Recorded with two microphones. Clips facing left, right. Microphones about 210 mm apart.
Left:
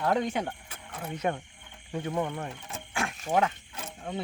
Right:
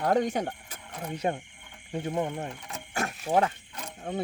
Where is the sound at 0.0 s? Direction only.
40° right (ahead or behind).